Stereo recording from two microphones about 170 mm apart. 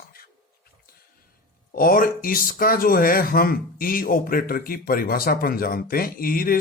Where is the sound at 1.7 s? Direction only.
60° left (ahead or behind).